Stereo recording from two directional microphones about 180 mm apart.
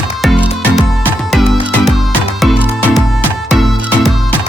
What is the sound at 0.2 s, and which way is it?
Music, centre (ahead or behind).